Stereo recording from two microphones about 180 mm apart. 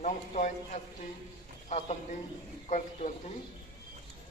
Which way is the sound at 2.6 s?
40° left (ahead or behind).